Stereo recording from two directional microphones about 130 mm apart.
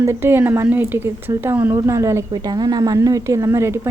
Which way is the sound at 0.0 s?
20° right (ahead or behind).